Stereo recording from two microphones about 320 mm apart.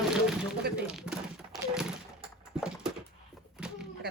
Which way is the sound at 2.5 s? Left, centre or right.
Centre.